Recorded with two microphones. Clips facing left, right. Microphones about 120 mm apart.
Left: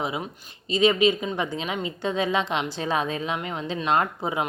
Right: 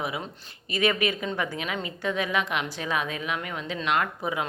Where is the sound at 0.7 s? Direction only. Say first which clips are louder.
Left 5 dB; 20° left (ahead or behind).